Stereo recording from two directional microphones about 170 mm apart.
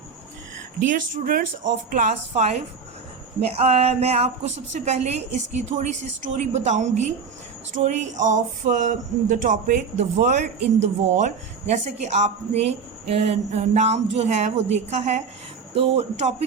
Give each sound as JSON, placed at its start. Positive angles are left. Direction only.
{"t": 0.9, "sound": "speech", "side_deg": -55}